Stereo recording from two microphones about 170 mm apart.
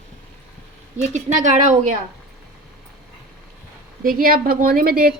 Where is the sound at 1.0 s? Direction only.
45° right (ahead or behind).